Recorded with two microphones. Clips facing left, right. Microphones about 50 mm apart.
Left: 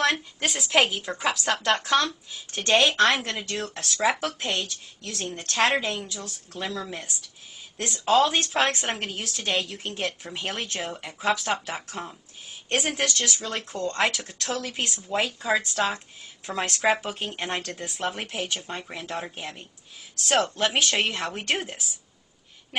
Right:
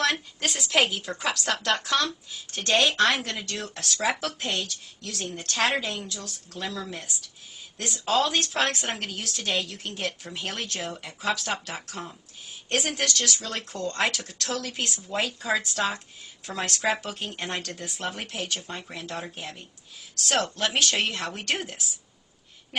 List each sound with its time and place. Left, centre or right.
0.0 s speech: centre
16.5 s speech: centre